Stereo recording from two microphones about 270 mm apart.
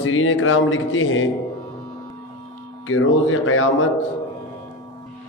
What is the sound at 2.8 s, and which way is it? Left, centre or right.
A man's voice, left.